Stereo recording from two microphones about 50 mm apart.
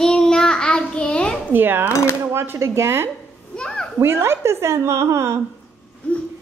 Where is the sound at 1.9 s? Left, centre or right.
Left.